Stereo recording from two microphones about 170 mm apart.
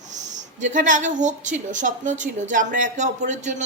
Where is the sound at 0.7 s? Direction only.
50° right (ahead or behind).